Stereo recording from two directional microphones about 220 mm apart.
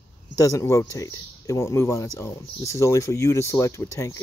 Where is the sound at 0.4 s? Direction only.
15° left (ahead or behind).